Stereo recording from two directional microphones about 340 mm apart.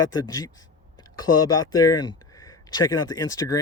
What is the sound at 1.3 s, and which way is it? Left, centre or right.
Speech, left.